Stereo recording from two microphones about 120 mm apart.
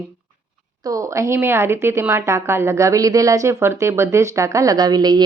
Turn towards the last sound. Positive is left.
turn(degrees=-35)  # may be behind; listen again after turning